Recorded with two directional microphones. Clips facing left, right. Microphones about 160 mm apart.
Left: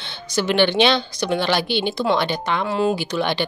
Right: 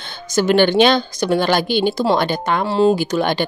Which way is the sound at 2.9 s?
45° right (ahead or behind).